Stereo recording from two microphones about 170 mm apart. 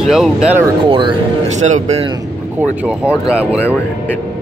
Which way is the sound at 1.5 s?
45° right (ahead or behind).